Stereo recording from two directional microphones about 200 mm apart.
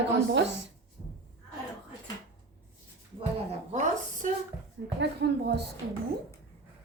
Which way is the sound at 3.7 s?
40° right (ahead or behind).